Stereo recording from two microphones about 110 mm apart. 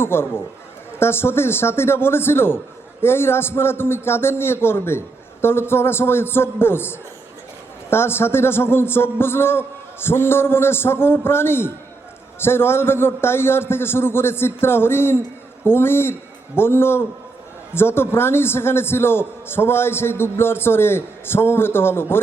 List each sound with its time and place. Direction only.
0.0 s a man's voice: 20° left (ahead or behind)